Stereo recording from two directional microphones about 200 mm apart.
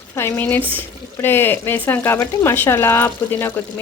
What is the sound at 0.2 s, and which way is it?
Speech, 10° left (ahead or behind).